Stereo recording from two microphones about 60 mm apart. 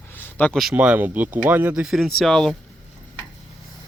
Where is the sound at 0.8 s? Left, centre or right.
Right.